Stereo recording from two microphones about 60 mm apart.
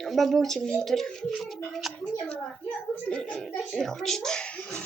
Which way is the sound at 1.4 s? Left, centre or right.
Centre.